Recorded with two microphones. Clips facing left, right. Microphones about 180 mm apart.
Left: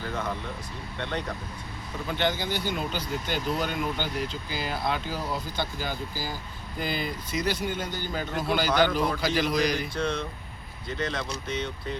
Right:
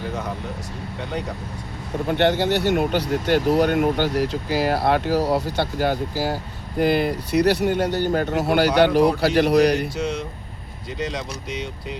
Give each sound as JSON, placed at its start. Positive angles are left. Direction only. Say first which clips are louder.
{"t": 2.0, "sound": "speech", "louder": "right 9 dB", "side_deg": -65}
{"t": 10.8, "sound": "speech", "louder": "right 3 dB", "side_deg": -15}